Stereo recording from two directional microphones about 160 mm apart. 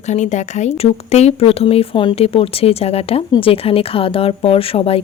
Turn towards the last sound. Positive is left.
turn(degrees=35)  # may be behind; listen again after turning